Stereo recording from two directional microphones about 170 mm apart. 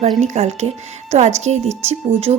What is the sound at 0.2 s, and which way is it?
A woman's voice, 40° right (ahead or behind).